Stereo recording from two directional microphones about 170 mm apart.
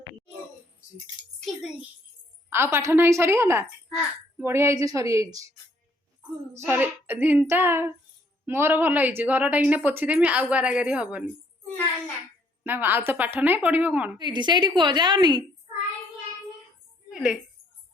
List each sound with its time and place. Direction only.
1.5 s a child's voice: centre (ahead or behind)
2.5 s a woman's voice: 15° right (ahead or behind)
6.5 s a woman's voice: 15° right (ahead or behind)
12.6 s a woman's voice: 10° right (ahead or behind)
14.2 s a woman's voice: 25° right (ahead or behind)
17.1 s a sound: 5° right (ahead or behind)